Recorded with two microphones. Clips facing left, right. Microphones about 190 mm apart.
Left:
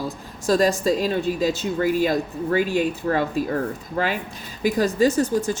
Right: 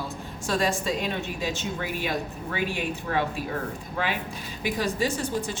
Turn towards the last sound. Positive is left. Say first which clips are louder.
# left 8 dB
turn(degrees=40)  # may be behind; listen again after turning